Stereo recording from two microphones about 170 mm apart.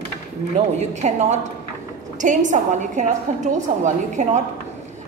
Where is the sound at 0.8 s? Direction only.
45° right (ahead or behind).